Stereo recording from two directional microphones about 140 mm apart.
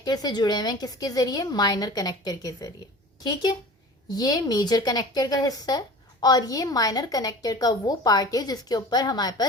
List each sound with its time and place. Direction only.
0.0 s a woman's voice: 30° left (ahead or behind)